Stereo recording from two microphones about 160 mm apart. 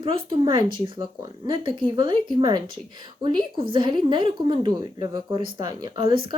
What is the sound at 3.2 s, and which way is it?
Speech, 30° right (ahead or behind).